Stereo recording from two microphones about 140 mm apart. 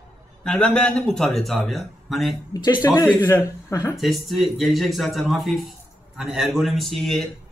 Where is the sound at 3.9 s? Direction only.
Centre (ahead or behind).